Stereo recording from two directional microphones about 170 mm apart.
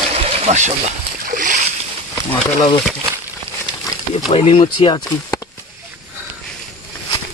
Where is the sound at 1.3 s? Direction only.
50° right (ahead or behind).